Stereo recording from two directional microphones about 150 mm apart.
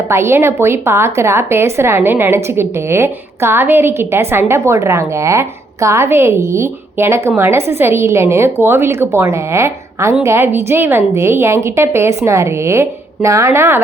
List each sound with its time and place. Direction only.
0.1 s a woman's voice: 15° right (ahead or behind)